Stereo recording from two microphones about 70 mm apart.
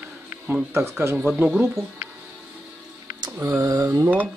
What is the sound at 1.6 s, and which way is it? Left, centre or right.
Speech, right.